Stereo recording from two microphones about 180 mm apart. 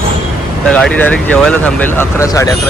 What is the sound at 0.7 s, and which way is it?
Speech, 5° left (ahead or behind).